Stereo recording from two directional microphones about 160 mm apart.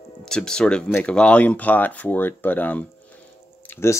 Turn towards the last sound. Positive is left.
turn(degrees=15)  # may be behind; listen again after turning